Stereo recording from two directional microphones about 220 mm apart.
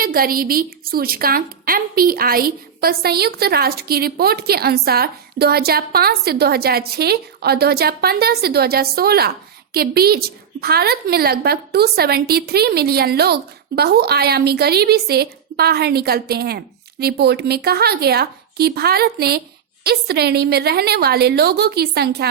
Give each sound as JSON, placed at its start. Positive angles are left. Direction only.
{"t": 0.0, "sound": "a woman's voice", "side_deg": -40}